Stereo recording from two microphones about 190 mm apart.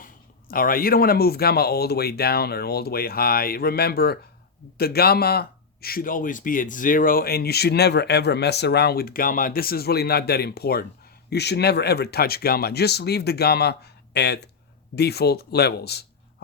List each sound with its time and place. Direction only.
0.0 s a man's voice: 50° left (ahead or behind)